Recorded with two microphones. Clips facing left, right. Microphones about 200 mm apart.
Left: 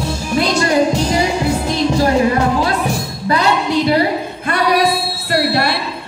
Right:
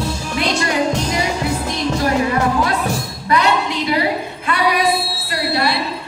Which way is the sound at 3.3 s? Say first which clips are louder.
Left 2 dB; 35° left (ahead or behind).